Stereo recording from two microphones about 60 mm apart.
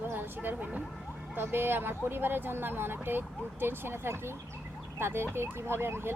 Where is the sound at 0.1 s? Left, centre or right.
Right.